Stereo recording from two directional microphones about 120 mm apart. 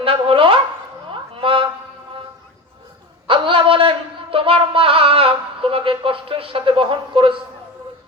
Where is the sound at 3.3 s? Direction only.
45° right (ahead or behind).